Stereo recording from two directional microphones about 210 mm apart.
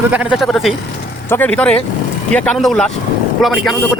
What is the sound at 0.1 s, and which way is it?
Speech, 5° right (ahead or behind).